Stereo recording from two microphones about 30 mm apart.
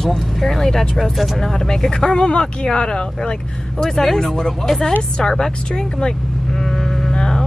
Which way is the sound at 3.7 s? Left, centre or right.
Centre.